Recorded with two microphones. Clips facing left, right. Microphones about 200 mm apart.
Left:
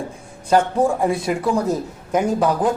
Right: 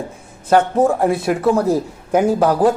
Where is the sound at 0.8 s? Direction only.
5° right (ahead or behind).